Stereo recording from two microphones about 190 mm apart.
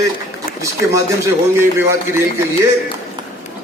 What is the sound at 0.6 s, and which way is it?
Speech, 15° right (ahead or behind).